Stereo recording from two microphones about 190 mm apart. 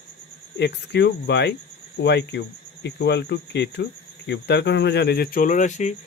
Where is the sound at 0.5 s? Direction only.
65° left (ahead or behind).